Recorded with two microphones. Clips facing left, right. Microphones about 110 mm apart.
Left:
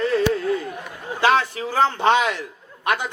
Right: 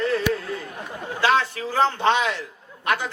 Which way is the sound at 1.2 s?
15° left (ahead or behind).